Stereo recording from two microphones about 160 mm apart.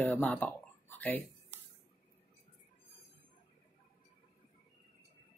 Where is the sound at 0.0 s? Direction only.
10° left (ahead or behind).